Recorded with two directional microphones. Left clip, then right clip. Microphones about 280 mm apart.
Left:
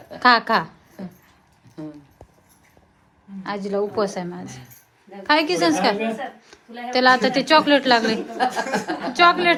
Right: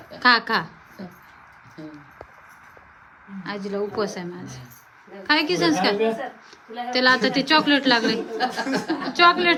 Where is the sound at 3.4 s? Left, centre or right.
Centre.